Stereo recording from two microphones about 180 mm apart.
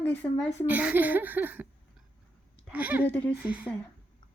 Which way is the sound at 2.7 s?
10° right (ahead or behind).